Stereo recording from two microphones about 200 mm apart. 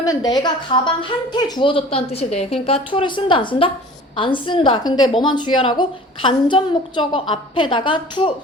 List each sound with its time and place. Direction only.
0.0 s a woman's voice: 20° left (ahead or behind)